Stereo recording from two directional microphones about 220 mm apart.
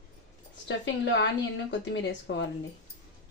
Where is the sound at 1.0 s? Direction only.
55° left (ahead or behind).